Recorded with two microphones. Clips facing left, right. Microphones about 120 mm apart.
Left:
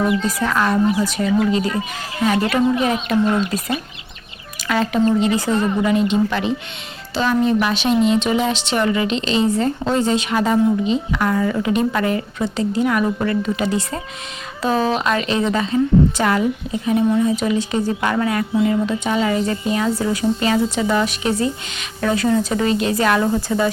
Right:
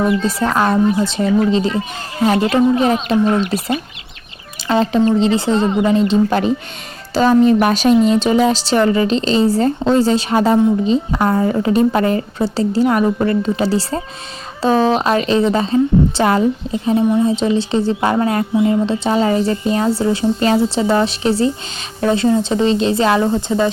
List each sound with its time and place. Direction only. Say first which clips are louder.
0.3 s a woman's voice: right 3 dB; 30° right (ahead or behind)
4.7 s a woman's voice: right 3 dB; 30° right (ahead or behind)
18.5 s a woman's voice: right 2 dB; 20° right (ahead or behind)